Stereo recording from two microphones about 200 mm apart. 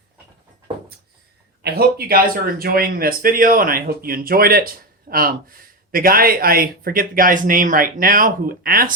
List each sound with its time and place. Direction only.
1.6 s speech: 50° right (ahead or behind)